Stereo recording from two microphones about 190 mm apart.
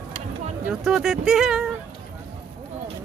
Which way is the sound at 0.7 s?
Centre (ahead or behind).